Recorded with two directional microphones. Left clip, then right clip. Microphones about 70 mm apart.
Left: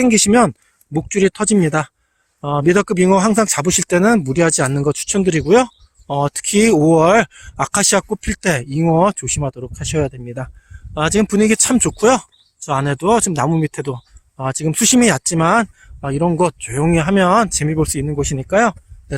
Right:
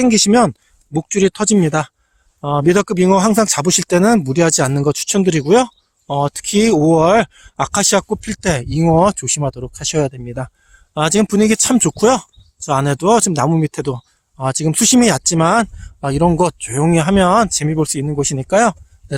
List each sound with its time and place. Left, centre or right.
0.0 s speech: centre
8.6 s speech: right
16.0 s speech: right
16.4 s speech: right